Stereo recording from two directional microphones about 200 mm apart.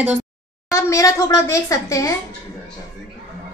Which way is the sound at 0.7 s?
15° left (ahead or behind).